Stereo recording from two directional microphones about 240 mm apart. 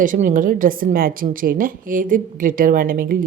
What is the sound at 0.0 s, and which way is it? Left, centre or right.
A woman's voice, right.